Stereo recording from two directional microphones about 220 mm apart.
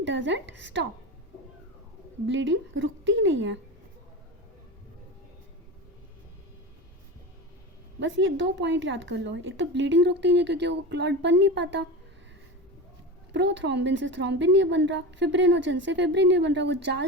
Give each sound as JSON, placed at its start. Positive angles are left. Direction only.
{"t": 0.0, "sound": "a woman's voice", "side_deg": -55}
{"t": 2.2, "sound": "a woman's voice", "side_deg": -60}
{"t": 7.9, "sound": "a woman's voice", "side_deg": -60}
{"t": 13.3, "sound": "a woman's voice", "side_deg": -55}